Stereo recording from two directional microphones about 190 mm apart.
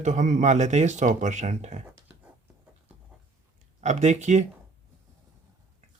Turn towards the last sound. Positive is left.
turn(degrees=-40)  # may be behind; listen again after turning